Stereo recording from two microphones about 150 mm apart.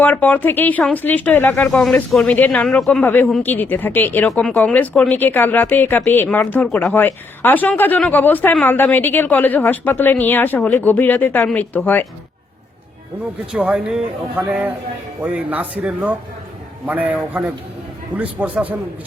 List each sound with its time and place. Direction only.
0.0 s a woman's voice: 10° left (ahead or behind)
13.5 s speech: 5° right (ahead or behind)